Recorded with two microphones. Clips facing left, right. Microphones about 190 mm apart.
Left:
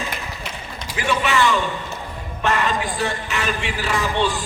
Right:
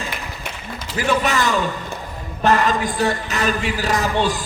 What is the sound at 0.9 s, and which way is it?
A man's voice, 40° right (ahead or behind).